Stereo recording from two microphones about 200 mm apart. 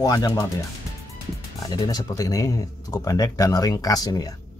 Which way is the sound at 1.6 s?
20° left (ahead or behind).